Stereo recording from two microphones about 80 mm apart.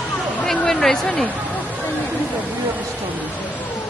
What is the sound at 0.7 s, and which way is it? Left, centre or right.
Speech, centre.